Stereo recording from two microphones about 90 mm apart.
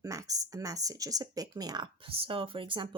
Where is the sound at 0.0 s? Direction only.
40° right (ahead or behind).